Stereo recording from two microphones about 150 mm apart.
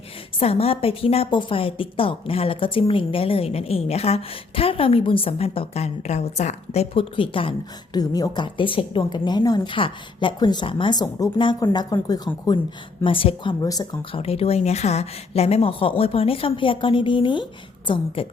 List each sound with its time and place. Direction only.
0.3 s a woman's voice: 40° left (ahead or behind)
7.9 s a woman's voice: 25° left (ahead or behind)
13.1 s a woman's voice: 35° left (ahead or behind)
14.1 s a woman's voice: 40° left (ahead or behind)